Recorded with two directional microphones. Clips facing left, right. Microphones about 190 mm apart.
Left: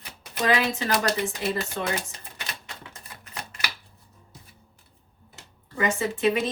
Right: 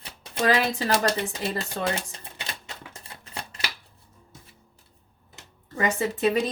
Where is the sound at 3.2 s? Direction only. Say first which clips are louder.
Right 1 dB; 30° right (ahead or behind).